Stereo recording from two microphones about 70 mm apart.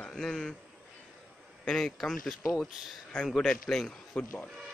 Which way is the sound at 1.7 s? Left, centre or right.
Centre.